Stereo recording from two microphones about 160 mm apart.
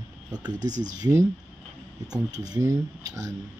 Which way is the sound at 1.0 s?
20° right (ahead or behind).